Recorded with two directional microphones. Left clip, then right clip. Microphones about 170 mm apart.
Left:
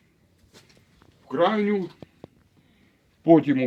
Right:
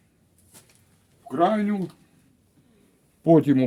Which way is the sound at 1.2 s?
80° right.